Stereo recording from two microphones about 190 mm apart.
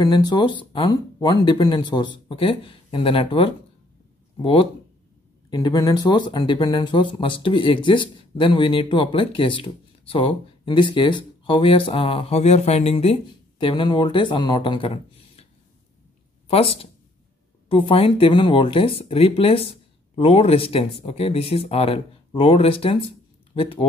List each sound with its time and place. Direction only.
0.0 s speech: 20° left (ahead or behind)
16.4 s speech: 30° left (ahead or behind)